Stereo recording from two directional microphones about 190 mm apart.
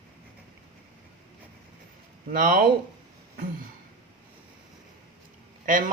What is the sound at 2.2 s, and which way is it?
Speech, 50° right (ahead or behind).